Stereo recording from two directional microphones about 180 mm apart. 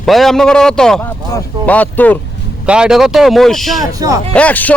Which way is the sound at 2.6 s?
5° right (ahead or behind).